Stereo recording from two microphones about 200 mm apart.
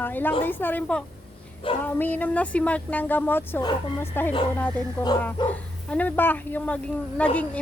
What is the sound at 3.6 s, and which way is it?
Speech, 20° left (ahead or behind).